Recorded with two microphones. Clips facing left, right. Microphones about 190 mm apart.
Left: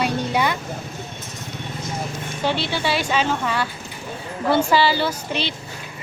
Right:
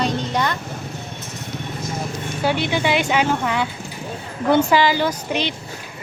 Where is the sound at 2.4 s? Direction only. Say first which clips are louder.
Right 3 dB; 15° right (ahead or behind).